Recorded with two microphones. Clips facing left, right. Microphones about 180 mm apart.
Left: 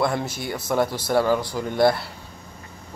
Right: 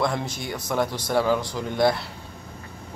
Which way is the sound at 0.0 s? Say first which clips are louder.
Left 2 dB; 5° left (ahead or behind).